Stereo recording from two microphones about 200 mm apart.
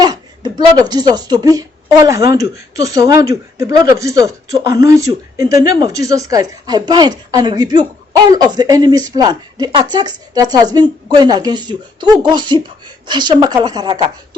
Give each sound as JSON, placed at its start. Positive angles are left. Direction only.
{"t": 0.0, "sound": "speech", "side_deg": -20}